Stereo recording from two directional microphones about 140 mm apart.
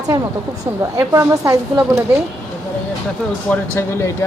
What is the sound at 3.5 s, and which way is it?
Speech, 15° left (ahead or behind).